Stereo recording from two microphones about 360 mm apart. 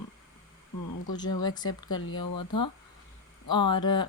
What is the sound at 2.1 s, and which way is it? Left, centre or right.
Speech, left.